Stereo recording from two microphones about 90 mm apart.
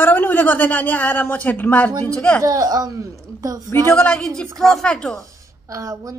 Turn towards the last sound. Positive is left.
turn(degrees=-40)  # may be behind; listen again after turning